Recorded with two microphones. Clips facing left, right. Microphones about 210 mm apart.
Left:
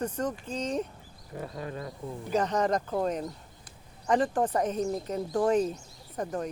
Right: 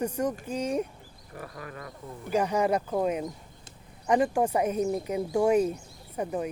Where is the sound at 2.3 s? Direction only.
10° right (ahead or behind).